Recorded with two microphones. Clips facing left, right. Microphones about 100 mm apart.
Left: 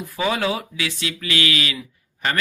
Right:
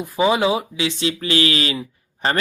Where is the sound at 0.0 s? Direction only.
20° right (ahead or behind).